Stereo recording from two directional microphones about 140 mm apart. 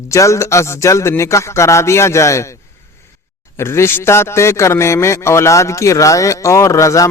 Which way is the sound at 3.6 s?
20° left (ahead or behind).